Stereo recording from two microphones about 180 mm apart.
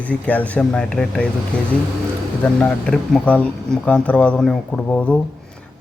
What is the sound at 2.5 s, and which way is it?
Speech, 5° left (ahead or behind).